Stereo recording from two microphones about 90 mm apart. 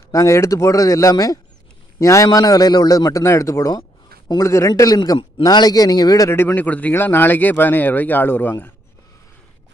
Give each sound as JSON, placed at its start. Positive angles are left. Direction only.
{"t": 0.1, "sound": "a man's voice", "side_deg": 35}
{"t": 6.3, "sound": "speech", "side_deg": 20}